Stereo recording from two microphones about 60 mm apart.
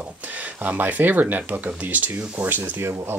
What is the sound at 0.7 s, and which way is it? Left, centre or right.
Speech, right.